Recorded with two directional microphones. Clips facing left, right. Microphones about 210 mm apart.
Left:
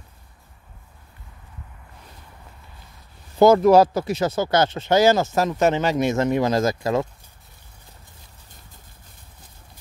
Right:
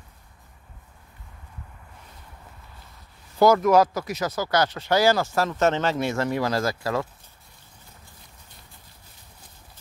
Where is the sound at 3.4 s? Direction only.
30° left (ahead or behind).